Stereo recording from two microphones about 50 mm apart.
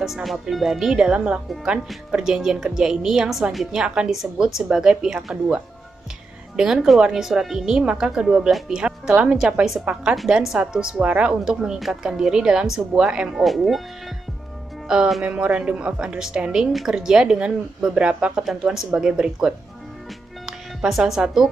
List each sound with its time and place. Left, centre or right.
0.0 s a woman's voice: centre
13.4 s speech: centre
14.9 s a woman's voice: centre